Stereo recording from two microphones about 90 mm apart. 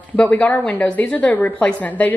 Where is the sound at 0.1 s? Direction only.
15° left (ahead or behind).